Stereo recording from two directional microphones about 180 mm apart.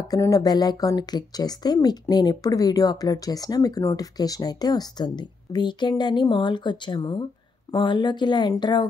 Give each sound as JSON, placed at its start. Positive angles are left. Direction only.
{"t": 0.1, "sound": "a woman's voice", "side_deg": 20}